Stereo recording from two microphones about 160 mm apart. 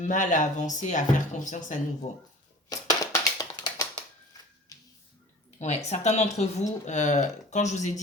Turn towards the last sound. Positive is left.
turn(degrees=45)  # may be behind; listen again after turning